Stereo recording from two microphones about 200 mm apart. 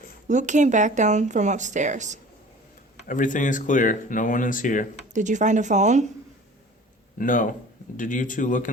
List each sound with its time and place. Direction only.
0.3 s speech: 35° right (ahead or behind)
3.1 s speech: 40° left (ahead or behind)
5.1 s speech: 35° right (ahead or behind)
7.2 s speech: 40° left (ahead or behind)